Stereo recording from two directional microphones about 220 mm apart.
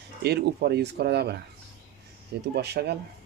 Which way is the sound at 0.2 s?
50° right (ahead or behind).